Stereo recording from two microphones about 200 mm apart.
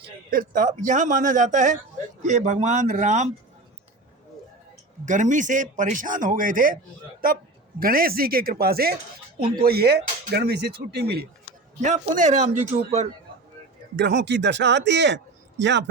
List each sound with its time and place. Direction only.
0.3 s speech: 45° right (ahead or behind)
5.0 s speech: 40° right (ahead or behind)
11.8 s speech: 40° right (ahead or behind)
13.9 s a man's voice: 60° right (ahead or behind)